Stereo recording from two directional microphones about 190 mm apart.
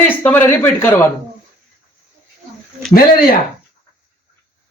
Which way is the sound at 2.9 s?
50° left (ahead or behind).